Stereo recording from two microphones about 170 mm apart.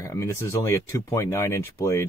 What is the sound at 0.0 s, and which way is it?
Speech, 15° left (ahead or behind).